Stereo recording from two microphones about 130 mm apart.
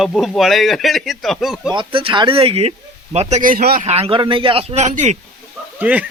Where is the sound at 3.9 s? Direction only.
45° right (ahead or behind); by 5.1 s 65° right (ahead or behind).